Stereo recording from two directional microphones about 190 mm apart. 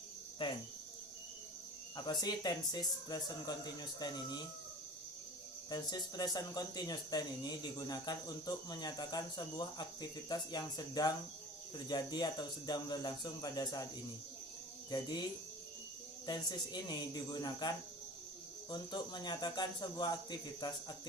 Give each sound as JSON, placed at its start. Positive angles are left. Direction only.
{"t": 0.4, "sound": "cricket", "side_deg": 25}
{"t": 2.0, "sound": "speech", "side_deg": 20}
{"t": 5.7, "sound": "speech", "side_deg": 20}
{"t": 14.8, "sound": "cricket", "side_deg": 20}
{"t": 16.2, "sound": "speech", "side_deg": 20}